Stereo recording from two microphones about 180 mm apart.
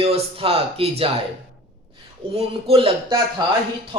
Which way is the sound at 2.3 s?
35° right (ahead or behind).